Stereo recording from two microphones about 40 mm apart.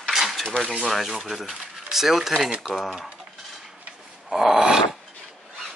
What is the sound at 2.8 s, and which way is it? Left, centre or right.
Speech, centre.